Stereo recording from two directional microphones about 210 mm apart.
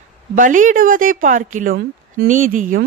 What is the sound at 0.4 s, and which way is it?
A woman's voice, 40° right (ahead or behind).